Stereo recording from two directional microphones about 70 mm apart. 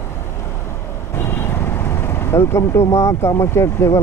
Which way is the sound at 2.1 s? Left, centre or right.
Left.